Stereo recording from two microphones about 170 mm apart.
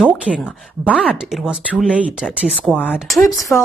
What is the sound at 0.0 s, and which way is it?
A woman's voice, 5° right (ahead or behind).